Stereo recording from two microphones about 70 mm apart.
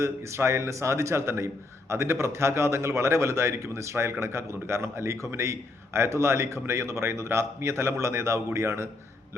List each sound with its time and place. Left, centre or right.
0.0 s a man's voice: right